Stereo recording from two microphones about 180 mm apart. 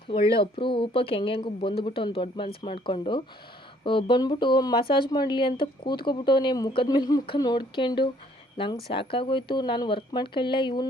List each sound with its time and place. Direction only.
0.1 s speech: 30° left (ahead or behind)